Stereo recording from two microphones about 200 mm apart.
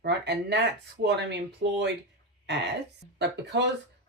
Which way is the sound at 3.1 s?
55° right (ahead or behind).